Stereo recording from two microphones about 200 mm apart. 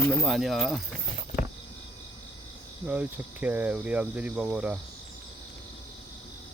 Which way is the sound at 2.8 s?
5° right (ahead or behind).